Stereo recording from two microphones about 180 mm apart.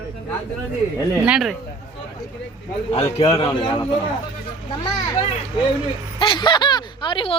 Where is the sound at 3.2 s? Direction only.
35° left (ahead or behind).